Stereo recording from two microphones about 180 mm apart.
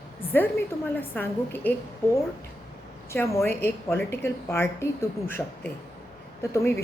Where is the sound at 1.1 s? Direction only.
10° left (ahead or behind).